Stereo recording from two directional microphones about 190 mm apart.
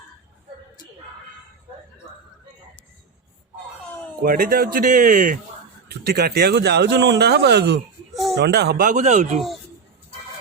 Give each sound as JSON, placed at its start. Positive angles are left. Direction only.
{"t": 4.2, "sound": "speech", "side_deg": -50}
{"t": 8.1, "sound": "a sound", "side_deg": 0}
{"t": 8.4, "sound": "speech", "side_deg": -60}
{"t": 8.9, "sound": "speech", "side_deg": -40}